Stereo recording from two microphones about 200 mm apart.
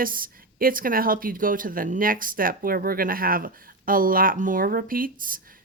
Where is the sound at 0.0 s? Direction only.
45° right (ahead or behind).